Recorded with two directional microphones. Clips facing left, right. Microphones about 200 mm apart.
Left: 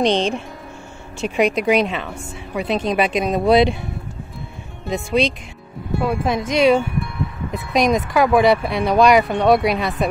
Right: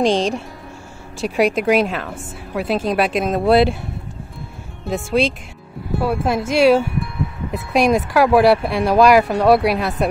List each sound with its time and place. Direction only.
0.0 s a woman's voice: centre (ahead or behind)
4.8 s a woman's voice: 5° right (ahead or behind)